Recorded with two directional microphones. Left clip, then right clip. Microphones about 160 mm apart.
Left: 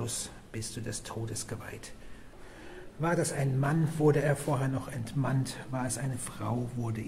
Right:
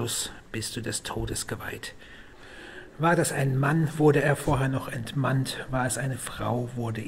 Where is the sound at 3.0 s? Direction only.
20° right (ahead or behind).